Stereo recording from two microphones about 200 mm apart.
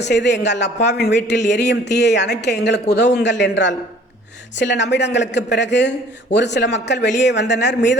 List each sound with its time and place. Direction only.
0.0 s speech: 60° left (ahead or behind)